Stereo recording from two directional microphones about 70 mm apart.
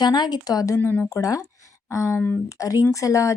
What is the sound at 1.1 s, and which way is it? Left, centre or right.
Speech, left.